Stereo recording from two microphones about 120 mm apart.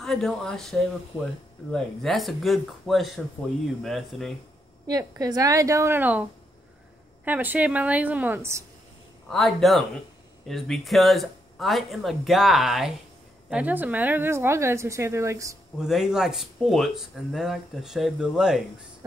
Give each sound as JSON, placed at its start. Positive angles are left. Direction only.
{"t": 0.0, "sound": "speech", "side_deg": 5}
{"t": 5.1, "sound": "speech", "side_deg": -30}
{"t": 7.2, "sound": "a woman's voice", "side_deg": -15}
{"t": 9.3, "sound": "speech", "side_deg": 0}
{"t": 15.8, "sound": "speech", "side_deg": -5}